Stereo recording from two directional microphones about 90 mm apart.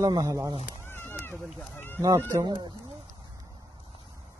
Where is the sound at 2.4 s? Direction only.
60° right (ahead or behind).